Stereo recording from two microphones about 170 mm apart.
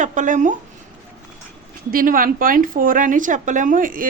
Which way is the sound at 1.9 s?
55° right (ahead or behind).